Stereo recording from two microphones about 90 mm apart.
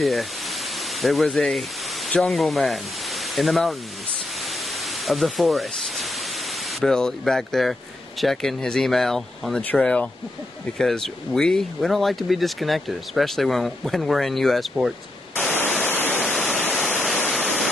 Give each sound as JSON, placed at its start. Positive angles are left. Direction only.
{"t": 0.0, "sound": "speech", "side_deg": 0}
{"t": 4.4, "sound": "pink noise", "side_deg": 0}
{"t": 6.7, "sound": "speech", "side_deg": 5}
{"t": 9.6, "sound": "speech", "side_deg": 15}
{"t": 15.5, "sound": "waterfall", "side_deg": 20}
{"t": 16.7, "sound": "waterfall", "side_deg": 0}